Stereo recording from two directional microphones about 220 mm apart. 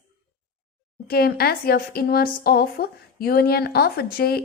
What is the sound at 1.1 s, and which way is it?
A woman's voice, 45° left (ahead or behind).